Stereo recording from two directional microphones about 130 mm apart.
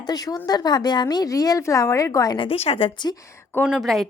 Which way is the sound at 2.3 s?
45° left (ahead or behind).